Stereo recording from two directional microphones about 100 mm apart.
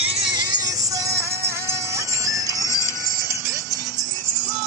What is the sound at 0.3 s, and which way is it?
Music, 45° right (ahead or behind).